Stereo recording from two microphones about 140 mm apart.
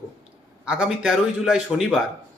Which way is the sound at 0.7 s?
5° right (ahead or behind).